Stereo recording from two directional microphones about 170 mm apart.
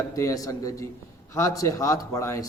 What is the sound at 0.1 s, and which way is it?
A man's voice, 20° left (ahead or behind).